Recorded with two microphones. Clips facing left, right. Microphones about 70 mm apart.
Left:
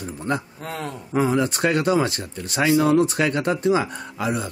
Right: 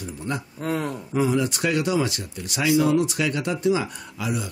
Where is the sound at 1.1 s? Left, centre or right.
Left.